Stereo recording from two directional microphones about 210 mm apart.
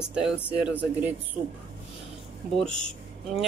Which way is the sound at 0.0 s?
5° right (ahead or behind).